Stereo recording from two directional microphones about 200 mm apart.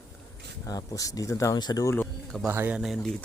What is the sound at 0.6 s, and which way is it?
Speech, 15° left (ahead or behind).